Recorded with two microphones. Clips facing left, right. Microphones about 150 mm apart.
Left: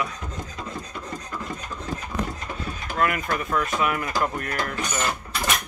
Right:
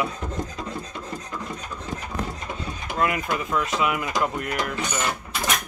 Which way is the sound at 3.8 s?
15° right (ahead or behind).